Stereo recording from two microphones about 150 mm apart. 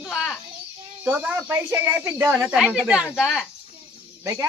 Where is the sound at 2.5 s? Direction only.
5° right (ahead or behind).